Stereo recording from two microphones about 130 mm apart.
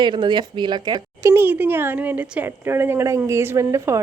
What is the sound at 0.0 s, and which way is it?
Speech, 35° right (ahead or behind).